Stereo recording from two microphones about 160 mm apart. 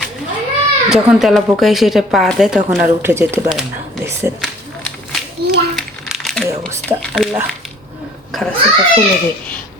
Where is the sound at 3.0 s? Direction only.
15° right (ahead or behind).